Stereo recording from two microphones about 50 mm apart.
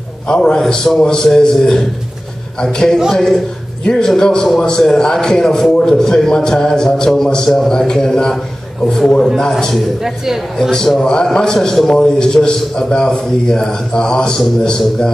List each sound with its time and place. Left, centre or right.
0.3 s a man's voice: centre
10.0 s speech: centre
10.6 s a man's voice: centre